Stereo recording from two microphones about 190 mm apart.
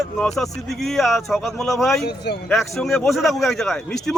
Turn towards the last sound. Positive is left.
turn(degrees=0)  # may be behind; listen again after turning